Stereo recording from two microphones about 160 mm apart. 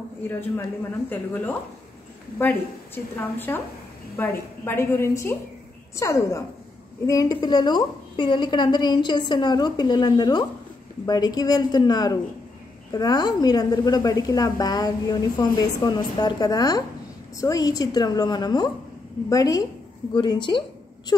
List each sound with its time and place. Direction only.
0.3 s a woman's voice: 15° left (ahead or behind); by 20.6 s 30° left (ahead or behind)